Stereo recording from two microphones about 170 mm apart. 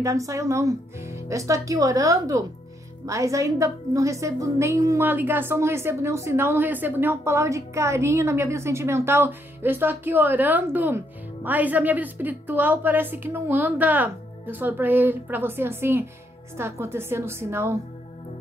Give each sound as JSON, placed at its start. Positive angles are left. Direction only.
{"t": 0.0, "sound": "a woman's voice", "side_deg": -20}